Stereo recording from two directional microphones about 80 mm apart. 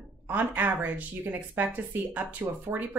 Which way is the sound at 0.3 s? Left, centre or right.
Right.